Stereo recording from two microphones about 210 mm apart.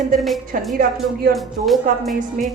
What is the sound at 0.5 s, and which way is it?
Speech, 40° right (ahead or behind).